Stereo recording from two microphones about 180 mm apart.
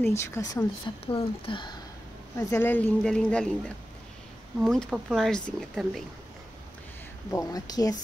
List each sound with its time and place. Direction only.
0.0 s speech: 15° left (ahead or behind)
2.3 s speech: 15° left (ahead or behind)
7.2 s speech: 20° left (ahead or behind)